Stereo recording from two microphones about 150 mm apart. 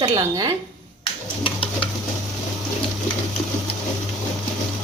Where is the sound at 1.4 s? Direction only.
35° left (ahead or behind).